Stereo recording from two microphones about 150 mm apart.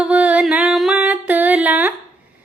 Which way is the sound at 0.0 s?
10° right (ahead or behind).